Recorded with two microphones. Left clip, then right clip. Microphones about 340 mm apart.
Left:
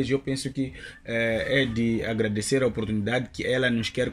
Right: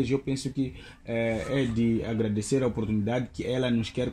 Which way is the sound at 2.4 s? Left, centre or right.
Left.